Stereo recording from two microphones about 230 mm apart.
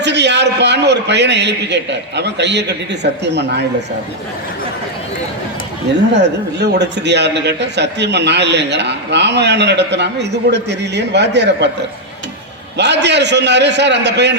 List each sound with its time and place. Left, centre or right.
0.0 s a man's voice: right
6.1 s a man's voice: right
12.7 s a man's voice: right